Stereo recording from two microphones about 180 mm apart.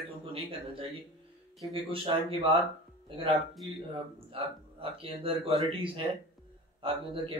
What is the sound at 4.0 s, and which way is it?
Speech, 30° right (ahead or behind).